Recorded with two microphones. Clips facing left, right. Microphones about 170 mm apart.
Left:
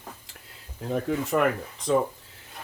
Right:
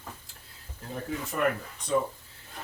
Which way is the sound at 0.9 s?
90° left.